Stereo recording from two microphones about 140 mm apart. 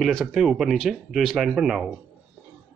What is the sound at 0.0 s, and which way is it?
Speech, centre (ahead or behind).